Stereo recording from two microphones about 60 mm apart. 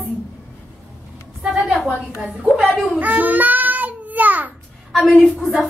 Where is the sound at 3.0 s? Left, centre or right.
Right.